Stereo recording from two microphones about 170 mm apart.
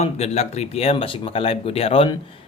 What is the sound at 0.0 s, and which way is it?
Speech, 40° left (ahead or behind).